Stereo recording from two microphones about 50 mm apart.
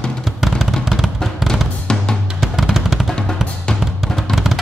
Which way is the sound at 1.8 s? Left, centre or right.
Centre.